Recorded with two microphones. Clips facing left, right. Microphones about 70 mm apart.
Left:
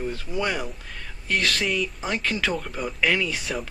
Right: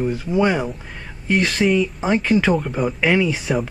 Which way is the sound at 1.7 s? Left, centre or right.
Centre.